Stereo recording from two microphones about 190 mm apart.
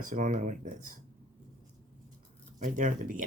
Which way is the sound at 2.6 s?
40° right (ahead or behind).